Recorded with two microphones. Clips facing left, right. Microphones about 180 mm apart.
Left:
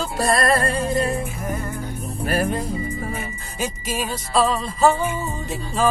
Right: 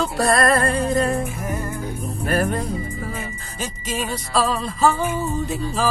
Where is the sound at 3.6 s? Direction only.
Centre (ahead or behind).